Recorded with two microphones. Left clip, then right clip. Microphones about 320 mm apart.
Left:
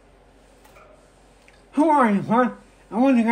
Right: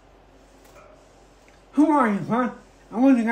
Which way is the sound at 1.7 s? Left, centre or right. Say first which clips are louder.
Left 2 dB; left.